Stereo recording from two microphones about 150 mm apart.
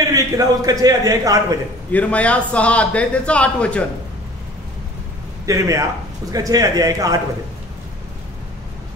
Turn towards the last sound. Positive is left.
turn(degrees=-25)  # may be behind; listen again after turning